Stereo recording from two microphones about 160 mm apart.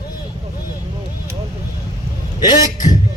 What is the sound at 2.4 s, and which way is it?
Speech, 55° left (ahead or behind).